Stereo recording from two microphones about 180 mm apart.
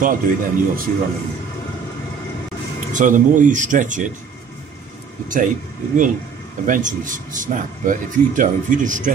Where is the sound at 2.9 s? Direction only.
45° right (ahead or behind).